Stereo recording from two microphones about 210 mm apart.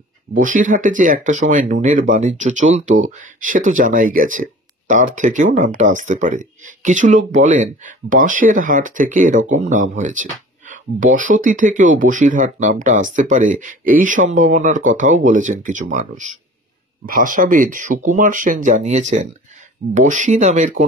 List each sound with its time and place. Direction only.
0.3 s speech: 40° right (ahead or behind)